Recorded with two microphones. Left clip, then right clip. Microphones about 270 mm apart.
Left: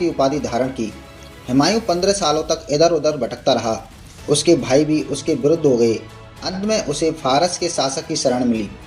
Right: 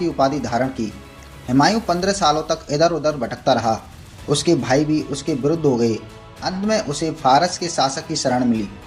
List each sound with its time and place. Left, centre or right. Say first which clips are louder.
0.0 s speech: left 1 dB; right